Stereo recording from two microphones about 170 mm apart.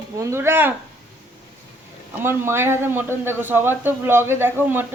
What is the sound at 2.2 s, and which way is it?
A man's voice, 15° right (ahead or behind).